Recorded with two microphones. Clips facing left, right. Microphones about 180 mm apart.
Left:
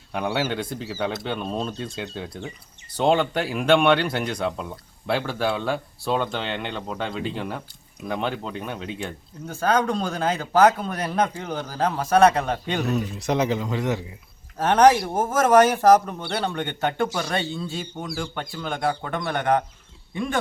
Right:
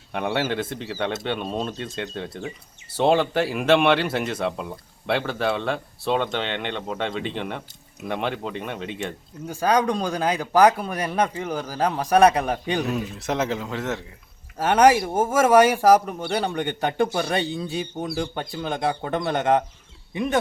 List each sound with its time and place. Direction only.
0.1 s speech: 5° left (ahead or behind)
9.5 s speech: 15° right (ahead or behind)